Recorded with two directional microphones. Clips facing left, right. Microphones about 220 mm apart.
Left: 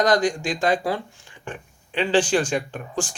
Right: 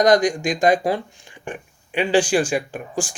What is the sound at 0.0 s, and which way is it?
Speech, 15° right (ahead or behind).